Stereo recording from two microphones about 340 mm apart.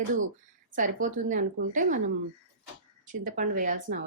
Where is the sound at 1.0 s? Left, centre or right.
Right.